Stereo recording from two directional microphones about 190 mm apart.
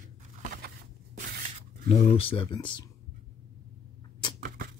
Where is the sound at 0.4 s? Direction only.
50° right (ahead or behind).